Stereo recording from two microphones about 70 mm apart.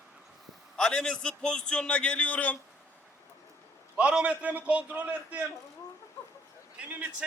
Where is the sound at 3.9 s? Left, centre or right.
Centre.